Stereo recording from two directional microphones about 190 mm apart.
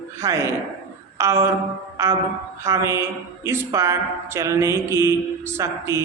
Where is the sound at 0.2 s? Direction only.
15° right (ahead or behind).